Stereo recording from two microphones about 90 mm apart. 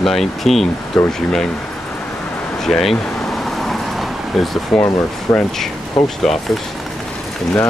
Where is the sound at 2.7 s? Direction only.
5° left (ahead or behind).